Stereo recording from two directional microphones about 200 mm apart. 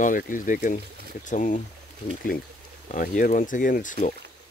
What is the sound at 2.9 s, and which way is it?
Speech, 40° left (ahead or behind).